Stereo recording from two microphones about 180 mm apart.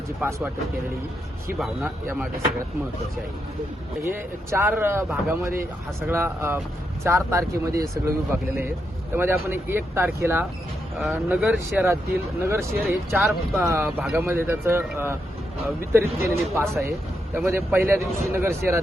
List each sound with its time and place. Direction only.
0.2 s speech: 10° right (ahead or behind)
1.5 s speech: centre (ahead or behind)
4.5 s speech: 10° right (ahead or behind)